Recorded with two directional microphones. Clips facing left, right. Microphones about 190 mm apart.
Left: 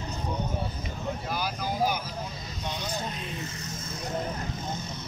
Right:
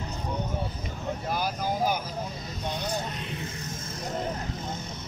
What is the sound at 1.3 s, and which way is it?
Vehicle, 45° right (ahead or behind).